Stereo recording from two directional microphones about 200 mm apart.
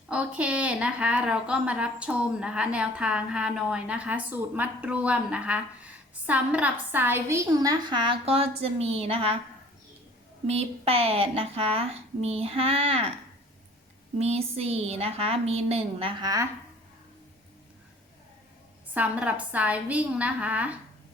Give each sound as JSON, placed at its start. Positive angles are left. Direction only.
{"t": 0.1, "sound": "a woman's voice", "side_deg": -5}
{"t": 10.4, "sound": "a woman's voice", "side_deg": -30}
{"t": 14.2, "sound": "a woman's voice", "side_deg": -30}
{"t": 18.9, "sound": "a woman's voice", "side_deg": -5}